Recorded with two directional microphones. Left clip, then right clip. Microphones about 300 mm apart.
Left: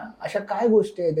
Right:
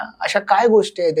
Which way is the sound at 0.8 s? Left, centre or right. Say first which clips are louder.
Right 5 dB; right.